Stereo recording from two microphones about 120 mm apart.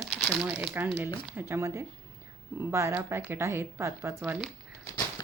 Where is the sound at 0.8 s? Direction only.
20° right (ahead or behind).